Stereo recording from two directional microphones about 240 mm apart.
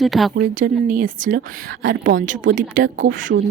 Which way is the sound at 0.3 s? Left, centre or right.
Right.